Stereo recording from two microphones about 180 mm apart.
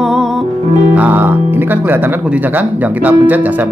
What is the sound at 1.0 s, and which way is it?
Speech, 10° right (ahead or behind).